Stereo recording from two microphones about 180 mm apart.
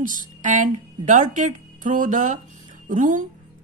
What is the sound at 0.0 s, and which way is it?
A woman's voice, 45° right (ahead or behind).